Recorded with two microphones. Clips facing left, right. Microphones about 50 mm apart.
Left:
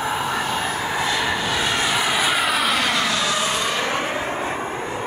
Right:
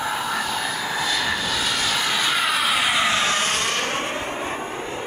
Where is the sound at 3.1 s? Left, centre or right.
Right.